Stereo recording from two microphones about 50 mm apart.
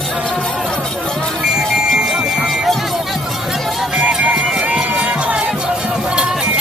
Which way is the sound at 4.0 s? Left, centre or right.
Right.